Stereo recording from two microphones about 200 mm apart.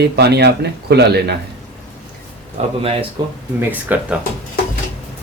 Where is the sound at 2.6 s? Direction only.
30° right (ahead or behind).